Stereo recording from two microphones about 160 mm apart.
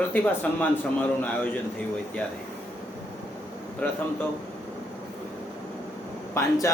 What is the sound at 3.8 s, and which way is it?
Speech, 10° left (ahead or behind).